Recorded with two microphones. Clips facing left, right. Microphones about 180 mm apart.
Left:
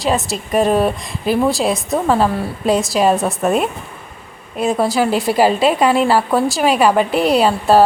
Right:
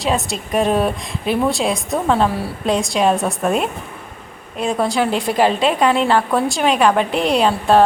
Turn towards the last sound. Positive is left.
turn(degrees=5)  # may be behind; listen again after turning